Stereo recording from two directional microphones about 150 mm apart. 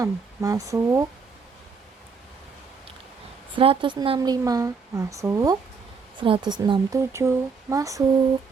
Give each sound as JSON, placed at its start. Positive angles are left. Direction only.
{"t": 0.0, "sound": "speech", "side_deg": -20}
{"t": 3.5, "sound": "speech", "side_deg": -35}
{"t": 4.2, "sound": "speech", "side_deg": -25}
{"t": 6.1, "sound": "speech", "side_deg": -35}